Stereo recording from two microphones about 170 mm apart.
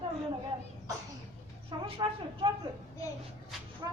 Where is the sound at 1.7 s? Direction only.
25° right (ahead or behind).